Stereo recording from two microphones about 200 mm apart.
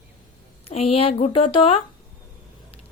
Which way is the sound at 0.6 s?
30° left (ahead or behind).